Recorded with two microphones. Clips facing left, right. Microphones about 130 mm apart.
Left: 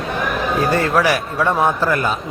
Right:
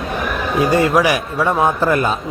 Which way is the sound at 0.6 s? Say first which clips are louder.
Right 4 dB; 15° right (ahead or behind).